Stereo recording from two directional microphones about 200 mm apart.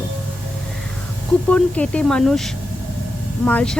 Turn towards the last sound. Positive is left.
turn(degrees=5)  # may be behind; listen again after turning